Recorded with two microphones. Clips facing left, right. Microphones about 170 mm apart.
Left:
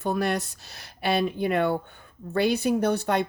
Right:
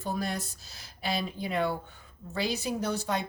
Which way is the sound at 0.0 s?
65° left (ahead or behind).